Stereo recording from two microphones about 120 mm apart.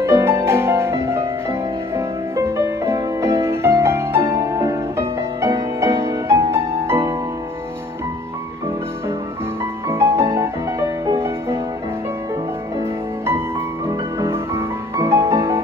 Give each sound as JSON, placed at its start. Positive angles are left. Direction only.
{"t": 0.1, "sound": "music", "side_deg": -20}
{"t": 9.8, "sound": "music", "side_deg": -20}
{"t": 13.8, "sound": "music", "side_deg": -25}